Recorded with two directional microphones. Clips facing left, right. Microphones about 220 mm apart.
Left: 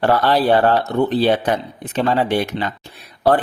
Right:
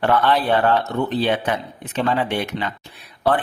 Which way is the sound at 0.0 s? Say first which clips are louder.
Left 3 dB; 35° left (ahead or behind).